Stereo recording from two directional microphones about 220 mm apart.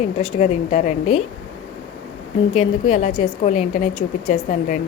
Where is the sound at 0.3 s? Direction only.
30° left (ahead or behind).